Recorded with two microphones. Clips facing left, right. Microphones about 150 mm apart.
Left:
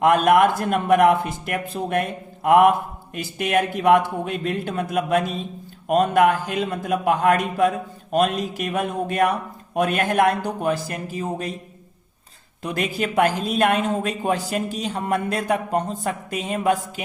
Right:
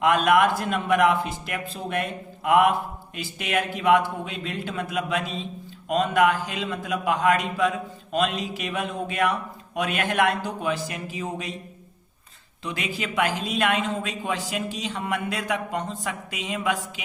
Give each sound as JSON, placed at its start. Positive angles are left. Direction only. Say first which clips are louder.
{"t": 0.0, "sound": "a man's voice", "louder": "left 4 dB", "side_deg": 50}
{"t": 12.6, "sound": "a man's voice", "louder": "left 6 dB", "side_deg": 50}